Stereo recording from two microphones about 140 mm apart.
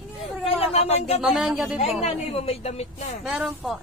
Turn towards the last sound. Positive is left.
turn(degrees=-5)  # may be behind; listen again after turning